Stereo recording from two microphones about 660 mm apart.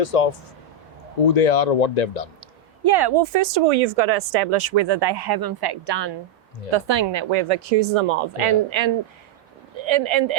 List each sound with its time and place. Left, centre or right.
0.0 s speech: left
1.3 s speech: left
2.8 s a woman's voice: right